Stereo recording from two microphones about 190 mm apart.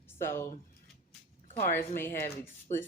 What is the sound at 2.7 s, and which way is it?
Speech, 40° left (ahead or behind).